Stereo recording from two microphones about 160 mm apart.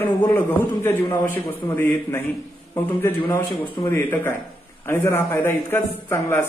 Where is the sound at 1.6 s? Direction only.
25° left (ahead or behind).